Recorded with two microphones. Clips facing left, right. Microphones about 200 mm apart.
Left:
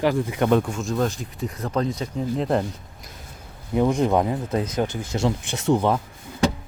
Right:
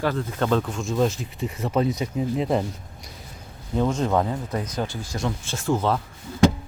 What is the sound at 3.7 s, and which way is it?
Speech, 15° left (ahead or behind).